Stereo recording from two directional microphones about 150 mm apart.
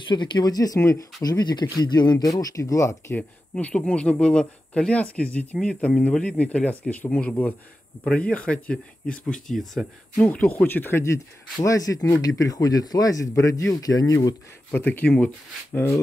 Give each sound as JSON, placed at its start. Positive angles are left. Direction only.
{"t": 0.1, "sound": "speech", "side_deg": 30}
{"t": 3.2, "sound": "speech", "side_deg": 10}
{"t": 14.7, "sound": "speech", "side_deg": 15}